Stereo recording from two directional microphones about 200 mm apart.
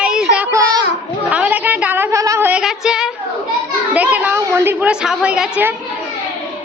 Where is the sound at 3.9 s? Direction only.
10° right (ahead or behind).